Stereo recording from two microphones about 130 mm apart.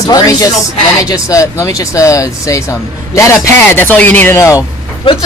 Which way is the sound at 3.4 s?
15° left (ahead or behind).